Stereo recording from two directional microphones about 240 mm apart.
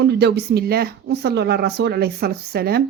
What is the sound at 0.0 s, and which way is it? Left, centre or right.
Speech, right.